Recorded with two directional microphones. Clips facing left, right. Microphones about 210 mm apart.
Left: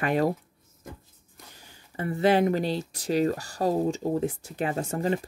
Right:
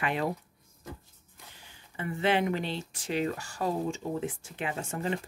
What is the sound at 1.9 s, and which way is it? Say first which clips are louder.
Speech: left 5 dB; 40° left (ahead or behind).